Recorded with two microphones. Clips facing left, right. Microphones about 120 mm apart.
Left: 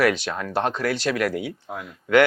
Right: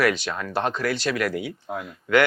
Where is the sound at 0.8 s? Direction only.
45° left (ahead or behind).